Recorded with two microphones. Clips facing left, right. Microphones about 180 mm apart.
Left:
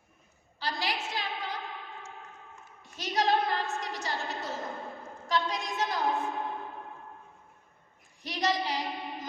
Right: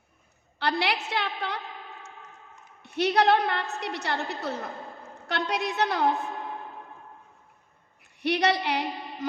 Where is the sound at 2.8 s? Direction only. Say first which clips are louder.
Right 7 dB; 65° right (ahead or behind).